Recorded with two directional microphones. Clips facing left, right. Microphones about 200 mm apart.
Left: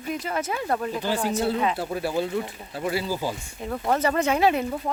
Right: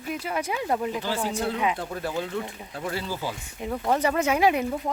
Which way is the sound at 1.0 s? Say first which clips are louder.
Left 3 dB; 15° left (ahead or behind).